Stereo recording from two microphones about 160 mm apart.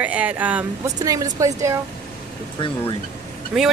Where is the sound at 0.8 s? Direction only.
20° right (ahead or behind).